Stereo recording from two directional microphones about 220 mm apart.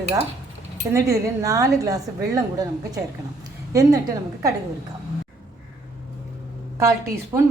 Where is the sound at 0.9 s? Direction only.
15° right (ahead or behind).